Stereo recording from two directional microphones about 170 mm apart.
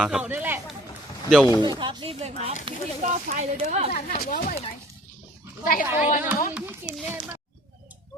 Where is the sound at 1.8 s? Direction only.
30° right (ahead or behind).